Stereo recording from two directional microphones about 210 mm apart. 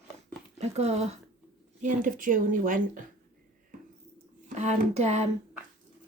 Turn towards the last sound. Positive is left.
turn(degrees=-35)  # may be behind; listen again after turning